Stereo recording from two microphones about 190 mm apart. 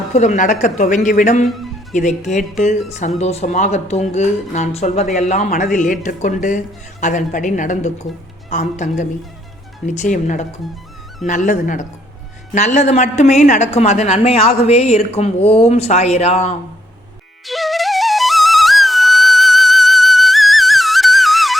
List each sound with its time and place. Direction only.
0.1 s a woman's voice: 40° left (ahead or behind)
17.4 s flute: centre (ahead or behind)